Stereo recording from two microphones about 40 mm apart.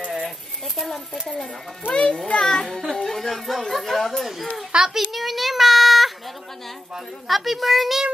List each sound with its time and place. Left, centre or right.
1.3 s a child's voice: left
2.5 s a child's voice: centre
4.7 s a child's voice: right
5.1 s a child's voice: centre
7.2 s a child's voice: centre